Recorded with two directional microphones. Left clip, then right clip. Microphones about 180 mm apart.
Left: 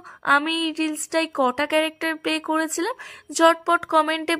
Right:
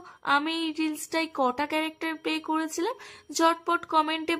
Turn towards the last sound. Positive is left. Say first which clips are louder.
# left 5 dB
turn(degrees=25)  # may be behind; listen again after turning